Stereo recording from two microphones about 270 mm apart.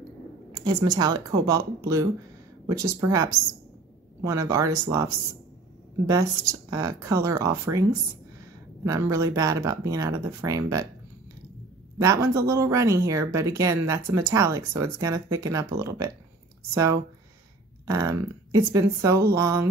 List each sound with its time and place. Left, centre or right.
0.6 s speech: centre
6.0 s speech: centre
8.8 s speech: centre
12.0 s speech: centre